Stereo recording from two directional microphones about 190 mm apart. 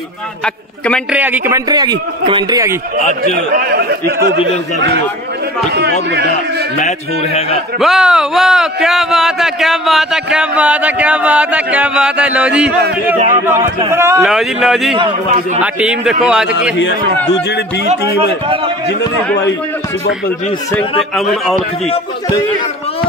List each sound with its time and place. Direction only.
1.1 s speech: 10° right (ahead or behind)
1.7 s a man's voice: 20° right (ahead or behind)
3.5 s speech: 55° right (ahead or behind)
7.8 s speech: centre (ahead or behind)
13.8 s speech: 15° right (ahead or behind)
14.2 s speech: centre (ahead or behind)
16.7 s a man's voice: 70° left (ahead or behind)